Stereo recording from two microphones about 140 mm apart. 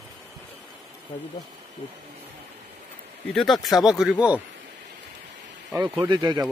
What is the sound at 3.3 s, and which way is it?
Speech, centre (ahead or behind).